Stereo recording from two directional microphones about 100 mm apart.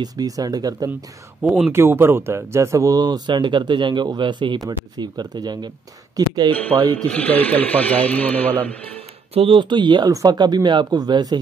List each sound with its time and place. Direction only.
0.0 s speech: 40° right (ahead or behind)
1.7 s speech: 25° right (ahead or behind); by 6.5 s 45° right (ahead or behind)
6.5 s speech: 15° left (ahead or behind)
9.3 s speech: 70° right (ahead or behind); by 11.3 s 45° right (ahead or behind)